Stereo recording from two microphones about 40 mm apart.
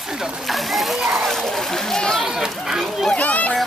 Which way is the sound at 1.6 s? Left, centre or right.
Centre.